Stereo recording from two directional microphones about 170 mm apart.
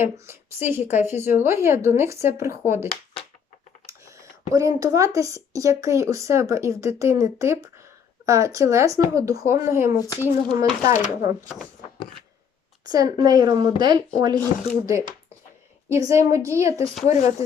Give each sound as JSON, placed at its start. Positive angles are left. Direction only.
{"t": 0.0, "sound": "speech", "side_deg": -15}
{"t": 4.0, "sound": "speech", "side_deg": -20}
{"t": 10.9, "sound": "speech", "side_deg": 45}
{"t": 12.8, "sound": "speech", "side_deg": -25}
{"t": 17.1, "sound": "speech", "side_deg": 40}